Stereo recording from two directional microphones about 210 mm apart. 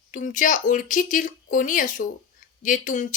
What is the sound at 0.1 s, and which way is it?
A woman's voice, 40° left (ahead or behind).